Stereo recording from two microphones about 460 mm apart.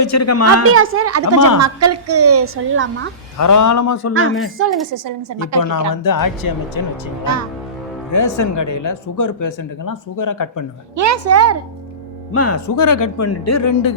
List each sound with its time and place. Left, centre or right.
0.0 s speech: left
0.6 s a woman's voice: right
3.3 s speech: left
4.6 s a woman's voice: right
5.9 s speech: left
8.1 s speech: left
10.9 s a woman's voice: right
12.3 s speech: left